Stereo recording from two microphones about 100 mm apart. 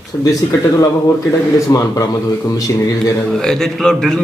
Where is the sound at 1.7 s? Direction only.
35° left (ahead or behind).